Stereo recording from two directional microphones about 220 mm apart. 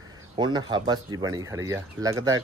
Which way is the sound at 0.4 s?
20° right (ahead or behind).